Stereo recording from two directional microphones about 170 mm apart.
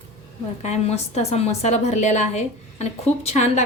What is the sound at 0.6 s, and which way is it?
A woman's voice, 40° left (ahead or behind).